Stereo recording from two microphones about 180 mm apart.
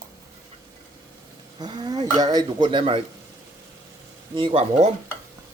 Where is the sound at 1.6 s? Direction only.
25° right (ahead or behind).